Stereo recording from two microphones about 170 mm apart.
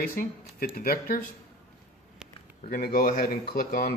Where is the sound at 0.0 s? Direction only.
55° left (ahead or behind).